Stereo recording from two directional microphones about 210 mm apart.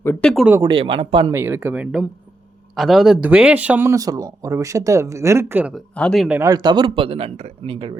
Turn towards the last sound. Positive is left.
turn(degrees=-25)  # may be behind; listen again after turning